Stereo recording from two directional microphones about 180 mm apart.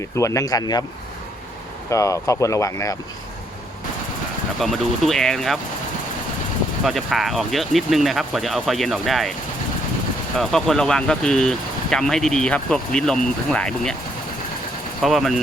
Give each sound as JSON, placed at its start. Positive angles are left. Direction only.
{"t": 0.2, "sound": "speech", "side_deg": 15}
{"t": 1.9, "sound": "speech", "side_deg": 15}
{"t": 4.6, "sound": "speech", "side_deg": 0}
{"t": 6.8, "sound": "speech", "side_deg": 0}
{"t": 10.3, "sound": "speech", "side_deg": 0}
{"t": 15.0, "sound": "speech", "side_deg": 0}